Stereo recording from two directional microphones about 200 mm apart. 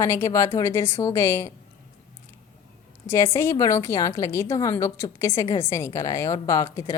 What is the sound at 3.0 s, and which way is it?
A woman's voice, 15° left (ahead or behind).